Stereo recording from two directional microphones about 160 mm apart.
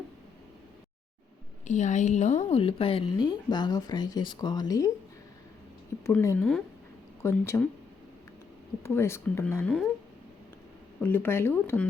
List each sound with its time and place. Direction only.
1.6 s a woman's voice: 50° left (ahead or behind); by 4.9 s 25° left (ahead or behind)
6.1 s speech: 15° left (ahead or behind)
8.8 s speech: 15° left (ahead or behind)
9.6 s speech: centre (ahead or behind)
11.0 s speech: 15° left (ahead or behind)